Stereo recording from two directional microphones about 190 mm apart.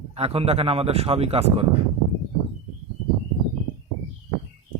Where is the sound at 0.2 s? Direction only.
30° right (ahead or behind).